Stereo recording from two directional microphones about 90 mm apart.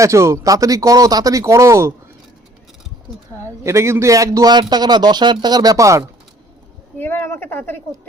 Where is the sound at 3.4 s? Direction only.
30° right (ahead or behind).